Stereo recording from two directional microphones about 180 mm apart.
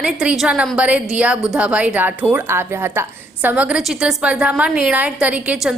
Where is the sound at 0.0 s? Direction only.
5° right (ahead or behind).